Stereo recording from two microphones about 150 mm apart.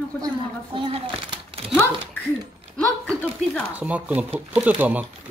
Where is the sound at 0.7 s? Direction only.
35° right (ahead or behind).